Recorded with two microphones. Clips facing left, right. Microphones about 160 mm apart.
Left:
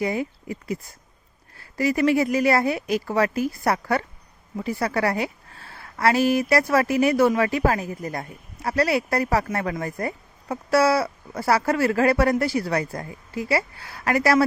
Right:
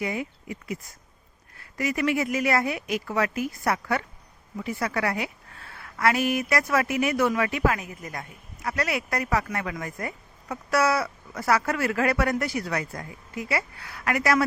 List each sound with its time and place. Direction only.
0.0 s a woman's voice: 35° left (ahead or behind)